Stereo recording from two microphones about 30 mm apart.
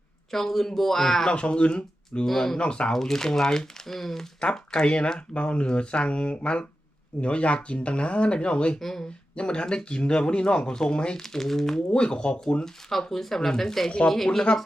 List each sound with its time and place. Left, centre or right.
0.3 s speech: centre
1.3 s speech: left
2.2 s speech: centre
2.6 s speech: left
2.9 s speech: centre
4.5 s speech: left
8.8 s speech: centre
9.3 s speech: left
11.2 s speech: centre
11.9 s speech: left
12.6 s speech: centre
14.5 s speech: left